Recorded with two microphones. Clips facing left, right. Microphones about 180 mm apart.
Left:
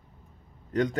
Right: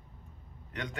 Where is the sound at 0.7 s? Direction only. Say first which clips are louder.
Left 14 dB; 40° left (ahead or behind).